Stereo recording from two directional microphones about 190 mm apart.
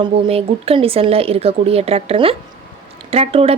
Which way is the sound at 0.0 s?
30° right (ahead or behind).